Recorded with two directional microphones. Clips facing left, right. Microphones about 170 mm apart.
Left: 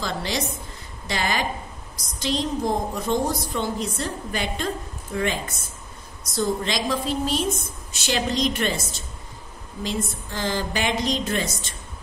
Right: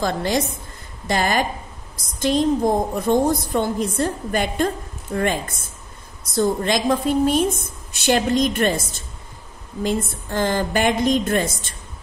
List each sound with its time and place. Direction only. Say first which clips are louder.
0.0 s a woman's voice: right 6 dB; 50° right (ahead or behind)